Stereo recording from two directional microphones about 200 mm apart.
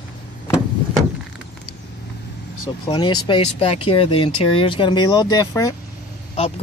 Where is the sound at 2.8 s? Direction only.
25° left (ahead or behind).